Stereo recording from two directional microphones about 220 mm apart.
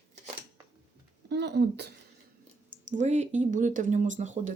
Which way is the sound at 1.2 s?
50° right (ahead or behind).